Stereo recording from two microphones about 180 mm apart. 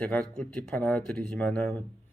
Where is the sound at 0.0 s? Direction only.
5° left (ahead or behind).